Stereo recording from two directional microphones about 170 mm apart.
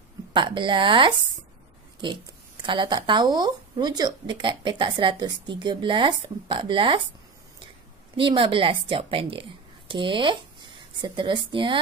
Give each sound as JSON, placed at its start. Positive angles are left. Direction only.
{"t": 0.3, "sound": "speech", "side_deg": -25}
{"t": 8.2, "sound": "a woman's voice", "side_deg": -30}